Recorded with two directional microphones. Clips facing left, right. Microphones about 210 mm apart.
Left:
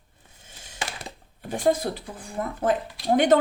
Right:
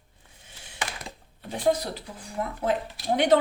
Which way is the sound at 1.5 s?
50° left (ahead or behind).